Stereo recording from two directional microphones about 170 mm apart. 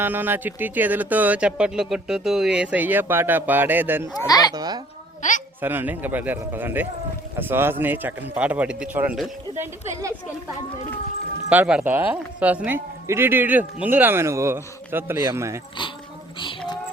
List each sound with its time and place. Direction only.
0.0 s speech: 10° right (ahead or behind)
4.2 s speech: 20° left (ahead or behind)
4.5 s a child's voice: 25° right (ahead or behind)
5.2 s a woman's voice: 45° left (ahead or behind)
5.5 s speech: 10° right (ahead or behind)
9.6 s speech: 15° right (ahead or behind)
11.4 s speech: 10° right (ahead or behind)
16.4 s female singing: 30° left (ahead or behind)